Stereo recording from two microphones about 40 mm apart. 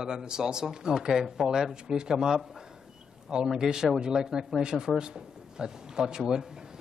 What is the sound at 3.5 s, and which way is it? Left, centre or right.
Speech, centre.